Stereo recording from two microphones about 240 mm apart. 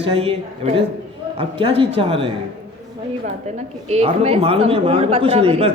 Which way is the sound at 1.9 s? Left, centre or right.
Right.